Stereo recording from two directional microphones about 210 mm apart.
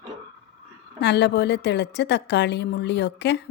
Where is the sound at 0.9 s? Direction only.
55° left (ahead or behind).